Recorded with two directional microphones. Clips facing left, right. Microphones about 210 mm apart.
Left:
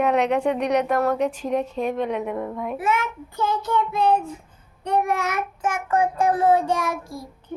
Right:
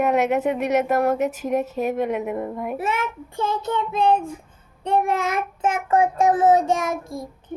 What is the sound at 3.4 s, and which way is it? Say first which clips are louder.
Child singing: left 1 dB; 25° right (ahead or behind).